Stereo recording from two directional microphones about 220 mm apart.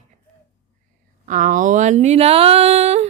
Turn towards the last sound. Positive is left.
turn(degrees=-30)  # may be behind; listen again after turning